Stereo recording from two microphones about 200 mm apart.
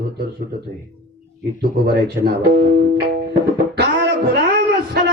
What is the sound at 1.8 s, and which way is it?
Speech, 50° right (ahead or behind).